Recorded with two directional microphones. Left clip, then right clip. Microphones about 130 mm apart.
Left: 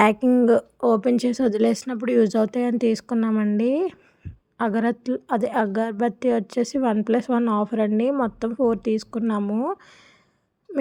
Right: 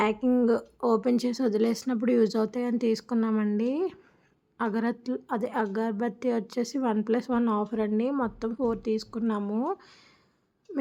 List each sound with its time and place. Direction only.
0.0 s a woman's voice: 50° left (ahead or behind)
0.3 s speech: 30° left (ahead or behind)
9.4 s speech: 15° left (ahead or behind)